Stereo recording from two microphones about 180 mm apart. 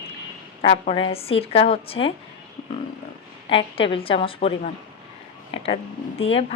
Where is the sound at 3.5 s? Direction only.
30° left (ahead or behind).